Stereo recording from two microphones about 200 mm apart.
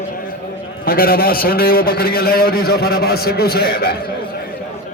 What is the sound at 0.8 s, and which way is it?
A man's voice, 50° left (ahead or behind).